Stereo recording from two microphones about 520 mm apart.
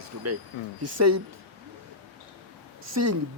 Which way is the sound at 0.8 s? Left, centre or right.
Right.